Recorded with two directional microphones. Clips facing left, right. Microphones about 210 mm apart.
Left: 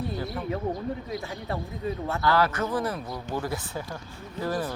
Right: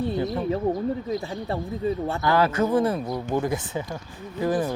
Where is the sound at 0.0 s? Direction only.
30° right (ahead or behind).